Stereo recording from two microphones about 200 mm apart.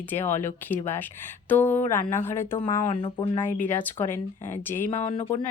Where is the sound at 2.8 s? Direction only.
25° left (ahead or behind).